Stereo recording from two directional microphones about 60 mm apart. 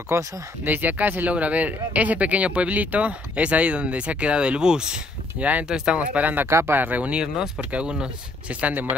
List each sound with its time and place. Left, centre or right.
0.1 s speech: right
0.7 s speech: right; by 5.0 s centre
5.4 s speech: right
5.7 s speech: centre
6.1 s speech: right
6.4 s speech: right